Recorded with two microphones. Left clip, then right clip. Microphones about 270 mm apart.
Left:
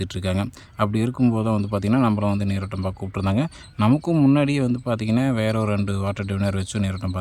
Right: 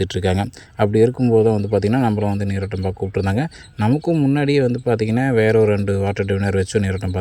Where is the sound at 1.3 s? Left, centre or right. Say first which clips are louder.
Right 10 dB; left.